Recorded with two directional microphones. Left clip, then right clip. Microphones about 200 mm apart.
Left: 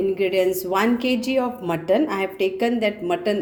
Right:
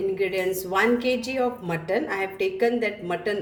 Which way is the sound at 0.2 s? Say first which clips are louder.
Left 5 dB; 40° left (ahead or behind).